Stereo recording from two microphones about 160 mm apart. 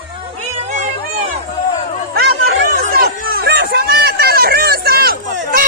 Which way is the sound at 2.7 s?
70° right (ahead or behind).